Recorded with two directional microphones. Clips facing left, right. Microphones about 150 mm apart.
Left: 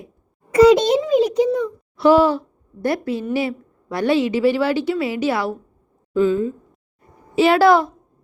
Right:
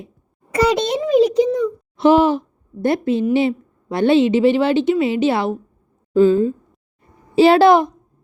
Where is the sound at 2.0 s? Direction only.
20° right (ahead or behind).